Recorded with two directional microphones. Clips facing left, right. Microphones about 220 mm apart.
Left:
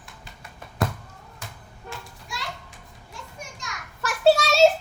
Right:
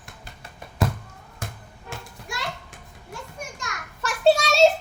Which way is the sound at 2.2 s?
50° right (ahead or behind).